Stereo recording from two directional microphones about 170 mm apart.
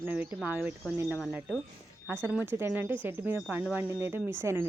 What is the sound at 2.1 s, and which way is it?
Speech, 10° right (ahead or behind).